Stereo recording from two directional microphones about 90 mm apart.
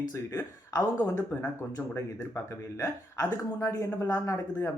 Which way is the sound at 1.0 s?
35° left (ahead or behind).